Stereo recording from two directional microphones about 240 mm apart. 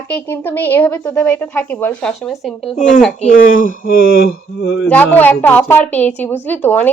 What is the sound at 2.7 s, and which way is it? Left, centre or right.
Speech, left.